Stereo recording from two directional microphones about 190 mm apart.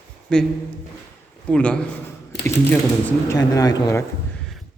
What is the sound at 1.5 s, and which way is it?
Speech, 5° left (ahead or behind).